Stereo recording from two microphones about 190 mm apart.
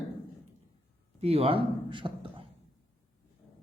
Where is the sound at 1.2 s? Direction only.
30° right (ahead or behind).